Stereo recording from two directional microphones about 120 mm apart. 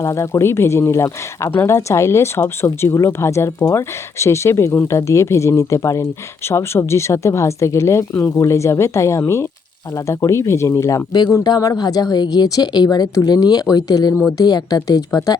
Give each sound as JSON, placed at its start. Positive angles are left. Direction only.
{"t": 0.0, "sound": "a woman's voice", "side_deg": 25}